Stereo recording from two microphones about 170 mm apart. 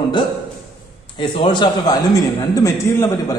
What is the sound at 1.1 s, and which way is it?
A man's voice, 25° left (ahead or behind).